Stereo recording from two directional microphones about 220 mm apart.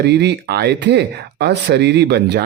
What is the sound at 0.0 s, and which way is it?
Speech, 50° right (ahead or behind).